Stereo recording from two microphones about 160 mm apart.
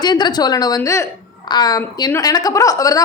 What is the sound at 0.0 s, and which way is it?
A woman's voice, 25° left (ahead or behind).